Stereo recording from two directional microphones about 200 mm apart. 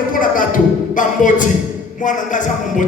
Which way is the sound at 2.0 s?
40° left (ahead or behind).